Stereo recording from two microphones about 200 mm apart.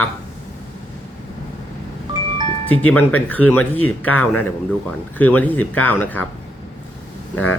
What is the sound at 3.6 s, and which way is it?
Speech, 90° left.